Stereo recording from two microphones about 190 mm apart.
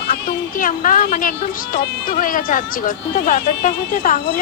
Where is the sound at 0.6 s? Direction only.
45° left (ahead or behind).